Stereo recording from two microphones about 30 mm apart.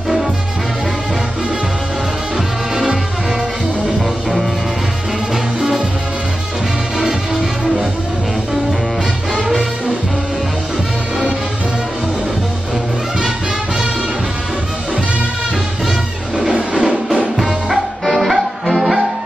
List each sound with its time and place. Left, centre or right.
2.7 s music: centre
9.5 s music: centre
16.7 s music: centre
18.0 s music: centre